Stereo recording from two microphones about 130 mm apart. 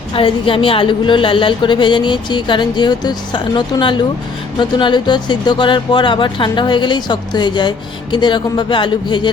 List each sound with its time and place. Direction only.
0.1 s a woman's voice: 45° left (ahead or behind)